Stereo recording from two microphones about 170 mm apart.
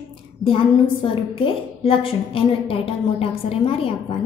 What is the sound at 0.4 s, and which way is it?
A woman's voice, 30° left (ahead or behind).